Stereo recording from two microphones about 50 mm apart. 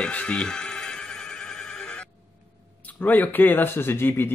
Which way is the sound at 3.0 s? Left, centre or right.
Left.